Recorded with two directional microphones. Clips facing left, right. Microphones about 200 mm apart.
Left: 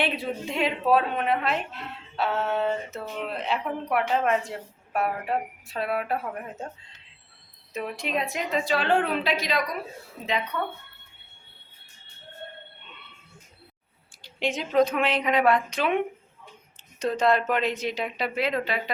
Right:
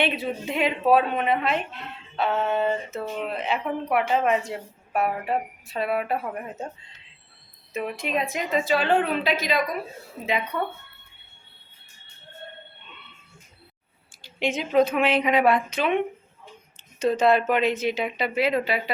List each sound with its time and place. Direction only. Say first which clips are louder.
0.0 s a woman's voice: right 2 dB; centre (ahead or behind)
7.7 s a woman's voice: right 2 dB; 5° right (ahead or behind)
14.2 s a woman's voice: right 2 dB; centre (ahead or behind)